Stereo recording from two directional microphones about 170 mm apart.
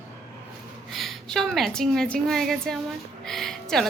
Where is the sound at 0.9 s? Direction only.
Centre (ahead or behind).